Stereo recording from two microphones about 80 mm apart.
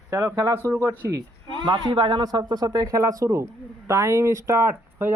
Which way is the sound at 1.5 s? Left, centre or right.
Right.